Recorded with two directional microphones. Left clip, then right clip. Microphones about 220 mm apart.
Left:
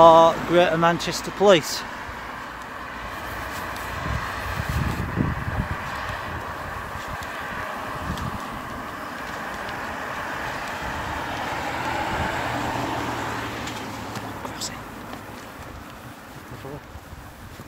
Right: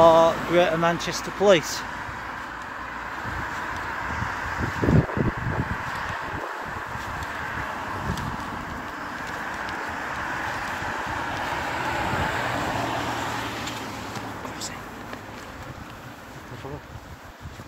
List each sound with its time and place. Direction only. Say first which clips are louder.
0.0 s speech: left 3 dB; 15° left (ahead or behind)
3.3 s vehicle: right 1 dB; 20° left (ahead or behind)
9.5 s vehicle: even; 25° left (ahead or behind); by 12.4 s 5° right (ahead or behind)
12.4 s vehicle: even; 25° right (ahead or behind); by 14.1 s 45° right (ahead or behind)